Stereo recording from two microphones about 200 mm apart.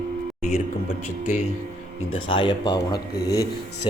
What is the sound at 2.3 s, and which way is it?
Speech, 25° left (ahead or behind).